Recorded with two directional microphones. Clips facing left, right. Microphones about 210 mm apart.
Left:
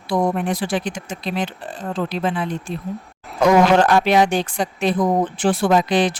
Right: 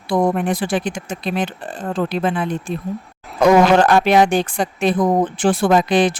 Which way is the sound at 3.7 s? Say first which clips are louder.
Right 2 dB; 55° right (ahead or behind).